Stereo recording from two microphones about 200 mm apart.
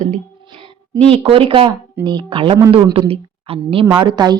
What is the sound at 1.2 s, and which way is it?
A woman's voice, 30° right (ahead or behind).